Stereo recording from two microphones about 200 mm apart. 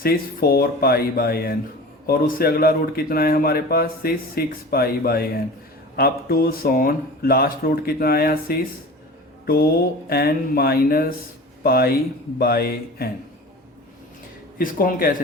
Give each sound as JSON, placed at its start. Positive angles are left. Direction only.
{"t": 0.0, "sound": "speech", "side_deg": 45}
{"t": 10.1, "sound": "speech", "side_deg": 50}
{"t": 14.6, "sound": "speech", "side_deg": 45}